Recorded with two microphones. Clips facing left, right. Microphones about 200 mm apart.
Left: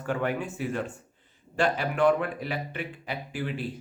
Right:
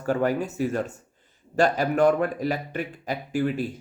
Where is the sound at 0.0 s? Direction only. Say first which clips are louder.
Right 5 dB; 40° right (ahead or behind).